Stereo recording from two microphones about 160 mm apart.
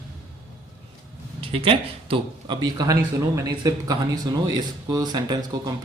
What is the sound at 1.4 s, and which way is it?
Speech, 35° right (ahead or behind).